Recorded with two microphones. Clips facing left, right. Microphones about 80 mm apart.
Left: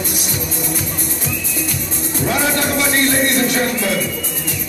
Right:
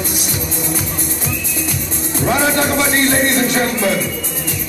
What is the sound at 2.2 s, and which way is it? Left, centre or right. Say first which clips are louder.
Music: right 3 dB; right.